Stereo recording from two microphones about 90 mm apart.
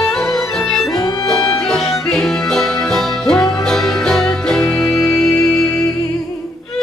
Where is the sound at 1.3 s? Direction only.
5° left (ahead or behind).